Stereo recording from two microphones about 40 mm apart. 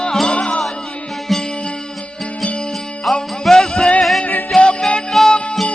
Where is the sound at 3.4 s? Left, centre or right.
Centre.